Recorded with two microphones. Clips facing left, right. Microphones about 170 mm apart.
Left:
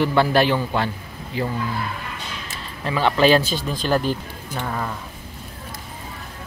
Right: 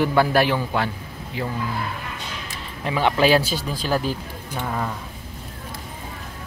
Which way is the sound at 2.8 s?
15° right (ahead or behind).